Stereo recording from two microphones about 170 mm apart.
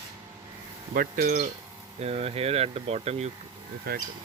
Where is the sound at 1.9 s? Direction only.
40° right (ahead or behind).